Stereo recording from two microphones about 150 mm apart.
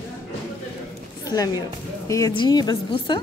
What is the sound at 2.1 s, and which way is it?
A woman's voice, 25° left (ahead or behind).